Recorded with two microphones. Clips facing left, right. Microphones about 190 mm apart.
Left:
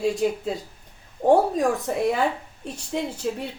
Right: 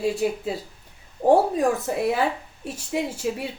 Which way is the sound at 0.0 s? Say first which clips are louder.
Left 1 dB; 5° right (ahead or behind).